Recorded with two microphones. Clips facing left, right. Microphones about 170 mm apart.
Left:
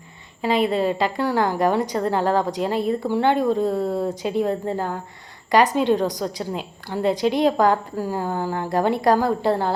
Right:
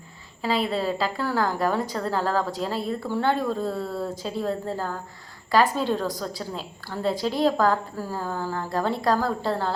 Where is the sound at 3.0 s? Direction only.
15° left (ahead or behind).